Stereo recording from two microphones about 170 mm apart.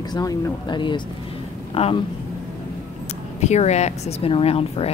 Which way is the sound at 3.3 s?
40° left (ahead or behind).